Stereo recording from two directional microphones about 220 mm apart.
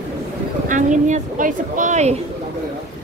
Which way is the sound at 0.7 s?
35° right (ahead or behind).